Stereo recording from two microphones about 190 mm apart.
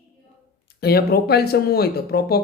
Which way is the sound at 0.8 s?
55° left (ahead or behind).